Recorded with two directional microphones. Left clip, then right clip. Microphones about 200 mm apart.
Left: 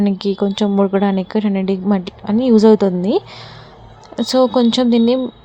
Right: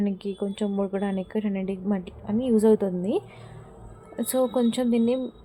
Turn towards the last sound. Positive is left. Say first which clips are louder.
# left 10 dB
turn(degrees=20)  # may be behind; listen again after turning